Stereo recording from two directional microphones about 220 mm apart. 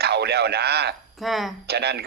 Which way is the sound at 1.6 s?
50° right (ahead or behind).